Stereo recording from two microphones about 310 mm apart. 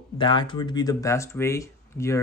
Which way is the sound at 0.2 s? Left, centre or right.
Centre.